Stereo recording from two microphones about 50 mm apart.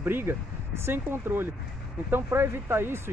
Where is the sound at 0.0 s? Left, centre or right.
Right.